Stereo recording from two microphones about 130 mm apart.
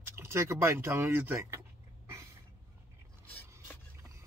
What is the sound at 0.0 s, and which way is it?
Speech, 20° right (ahead or behind).